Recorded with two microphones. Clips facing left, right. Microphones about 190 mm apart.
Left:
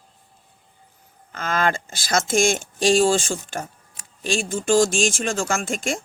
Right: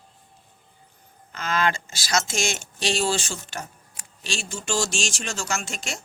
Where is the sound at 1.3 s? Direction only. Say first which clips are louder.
Left 2 dB; 50° left (ahead or behind).